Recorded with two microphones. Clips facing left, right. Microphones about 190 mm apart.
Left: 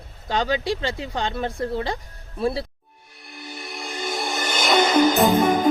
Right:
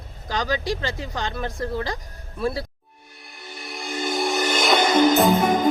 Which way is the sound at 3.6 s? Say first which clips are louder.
Right 3 dB; centre (ahead or behind).